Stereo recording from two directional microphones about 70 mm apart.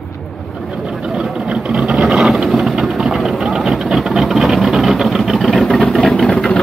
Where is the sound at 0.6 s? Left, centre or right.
Centre.